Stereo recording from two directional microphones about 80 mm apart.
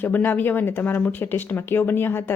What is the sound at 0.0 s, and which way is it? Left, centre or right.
Speech, left.